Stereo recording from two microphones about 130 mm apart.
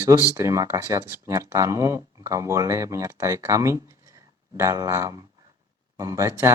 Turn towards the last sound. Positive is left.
turn(degrees=-20)  # may be behind; listen again after turning